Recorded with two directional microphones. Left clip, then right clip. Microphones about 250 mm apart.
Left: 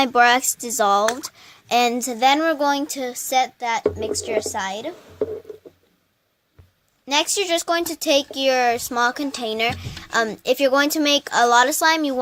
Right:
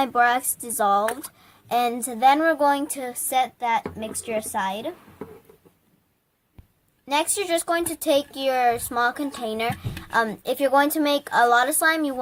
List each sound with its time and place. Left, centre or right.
0.0 s speech: left
7.1 s speech: left